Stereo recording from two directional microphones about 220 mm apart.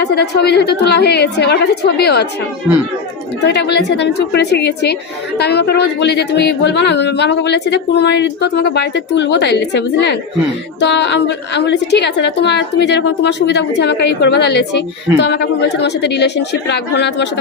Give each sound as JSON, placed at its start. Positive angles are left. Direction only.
{"t": 0.0, "sound": "a woman's voice", "side_deg": 50}
{"t": 3.4, "sound": "a woman's voice", "side_deg": 50}